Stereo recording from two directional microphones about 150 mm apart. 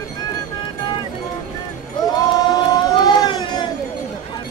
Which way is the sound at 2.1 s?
25° left (ahead or behind).